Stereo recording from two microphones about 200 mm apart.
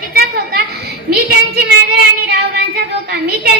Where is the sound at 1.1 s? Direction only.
55° right (ahead or behind).